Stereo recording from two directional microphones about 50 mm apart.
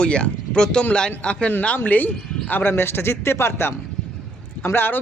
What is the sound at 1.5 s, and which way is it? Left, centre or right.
Speech, left.